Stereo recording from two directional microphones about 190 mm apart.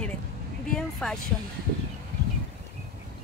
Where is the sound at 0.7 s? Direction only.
Centre (ahead or behind).